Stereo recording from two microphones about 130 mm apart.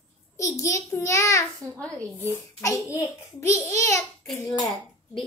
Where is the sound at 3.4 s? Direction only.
20° left (ahead or behind).